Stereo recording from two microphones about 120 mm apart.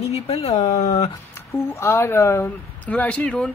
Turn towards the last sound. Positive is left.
turn(degrees=10)  # may be behind; listen again after turning